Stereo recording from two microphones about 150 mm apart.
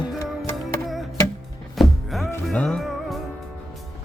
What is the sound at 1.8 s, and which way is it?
Music, centre (ahead or behind).